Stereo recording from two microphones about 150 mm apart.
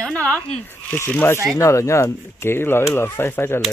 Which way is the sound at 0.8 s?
15° left (ahead or behind).